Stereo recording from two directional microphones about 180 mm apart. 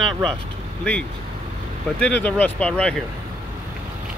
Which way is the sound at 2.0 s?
5° left (ahead or behind).